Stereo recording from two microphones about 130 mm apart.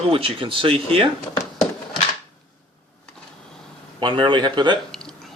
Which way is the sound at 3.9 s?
35° right (ahead or behind).